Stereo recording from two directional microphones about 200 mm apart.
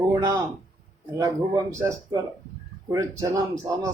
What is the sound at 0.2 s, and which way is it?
Speech, 15° right (ahead or behind).